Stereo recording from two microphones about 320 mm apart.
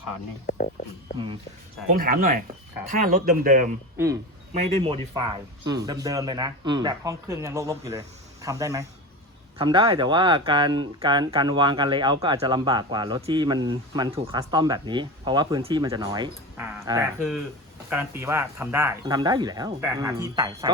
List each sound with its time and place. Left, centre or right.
0.4 s speech: left
2.0 s speech: right
3.9 s a man's voice: centre